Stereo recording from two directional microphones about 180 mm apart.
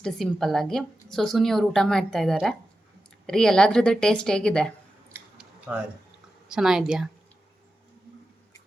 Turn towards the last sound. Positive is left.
turn(degrees=0)  # may be behind; listen again after turning